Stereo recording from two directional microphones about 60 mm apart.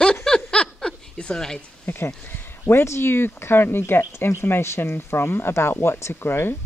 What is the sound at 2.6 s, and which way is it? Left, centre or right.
Speech, left.